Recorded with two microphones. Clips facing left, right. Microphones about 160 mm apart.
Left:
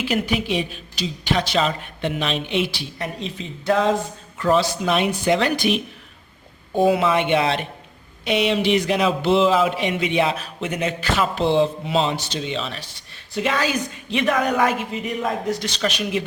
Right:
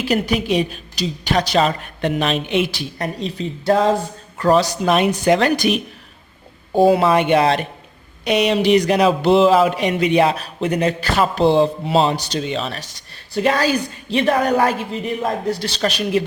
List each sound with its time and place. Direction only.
0.0 s a woman's voice: 40° right (ahead or behind)
6.7 s a woman's voice: 35° right (ahead or behind)